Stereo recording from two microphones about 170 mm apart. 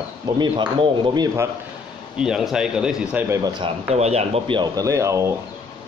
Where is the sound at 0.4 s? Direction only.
25° right (ahead or behind).